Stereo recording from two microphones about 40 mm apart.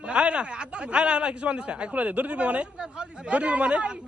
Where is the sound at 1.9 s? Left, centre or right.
Right.